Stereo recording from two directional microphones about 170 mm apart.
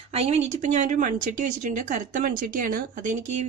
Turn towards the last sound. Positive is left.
turn(degrees=-45)  # may be behind; listen again after turning